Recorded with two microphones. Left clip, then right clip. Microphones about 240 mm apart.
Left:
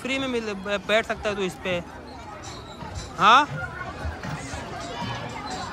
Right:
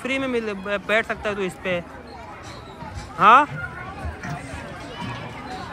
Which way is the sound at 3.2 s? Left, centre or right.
Centre.